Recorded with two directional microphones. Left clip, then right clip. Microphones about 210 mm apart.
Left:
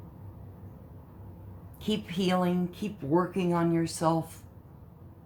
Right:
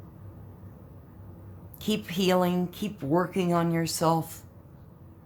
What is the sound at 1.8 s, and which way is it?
Speech, 30° right (ahead or behind).